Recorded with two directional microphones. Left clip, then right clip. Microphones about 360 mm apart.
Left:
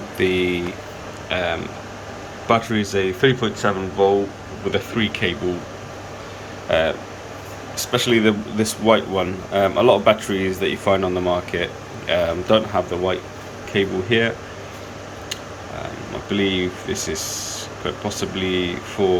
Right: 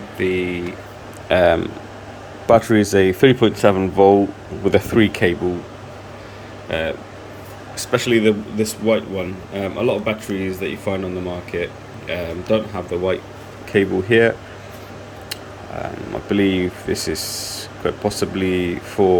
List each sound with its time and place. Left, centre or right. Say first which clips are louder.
0.2 s speech: left 1 dB; centre
1.3 s speech: right 8 dB; right
6.7 s speech: left 4 dB; centre
16.3 s speech: right 2 dB; centre